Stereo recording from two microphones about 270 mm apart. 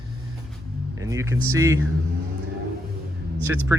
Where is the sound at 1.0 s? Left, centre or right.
Centre.